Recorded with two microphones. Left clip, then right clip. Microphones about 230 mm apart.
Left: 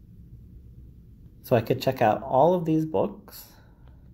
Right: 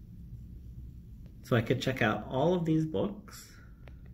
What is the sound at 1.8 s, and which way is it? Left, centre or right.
Speech, left.